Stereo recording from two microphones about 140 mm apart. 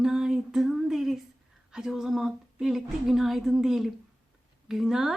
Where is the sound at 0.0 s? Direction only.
5° right (ahead or behind).